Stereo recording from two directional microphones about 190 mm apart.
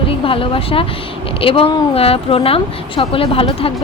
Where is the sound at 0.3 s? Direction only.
30° left (ahead or behind).